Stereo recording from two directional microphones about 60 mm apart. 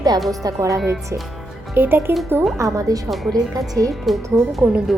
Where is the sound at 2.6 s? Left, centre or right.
Right.